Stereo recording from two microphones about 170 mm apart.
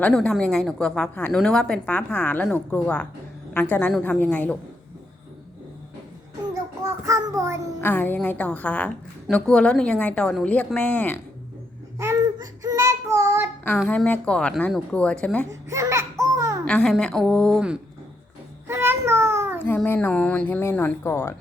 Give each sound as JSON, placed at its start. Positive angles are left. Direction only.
{"t": 0.0, "sound": "a woman's voice", "side_deg": 5}
{"t": 6.5, "sound": "child singing", "side_deg": -20}
{"t": 7.8, "sound": "a woman's voice", "side_deg": 10}
{"t": 11.9, "sound": "child singing", "side_deg": -20}
{"t": 13.8, "sound": "speech", "side_deg": 5}
{"t": 15.7, "sound": "a sound", "side_deg": -20}
{"t": 16.6, "sound": "a woman's voice", "side_deg": 5}
{"t": 18.7, "sound": "a sound", "side_deg": -15}
{"t": 19.6, "sound": "speech", "side_deg": 10}